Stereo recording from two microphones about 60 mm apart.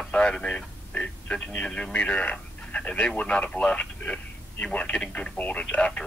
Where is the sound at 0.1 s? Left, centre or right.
Centre.